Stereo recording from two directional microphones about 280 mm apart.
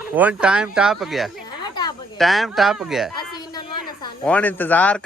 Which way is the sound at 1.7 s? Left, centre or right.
Centre.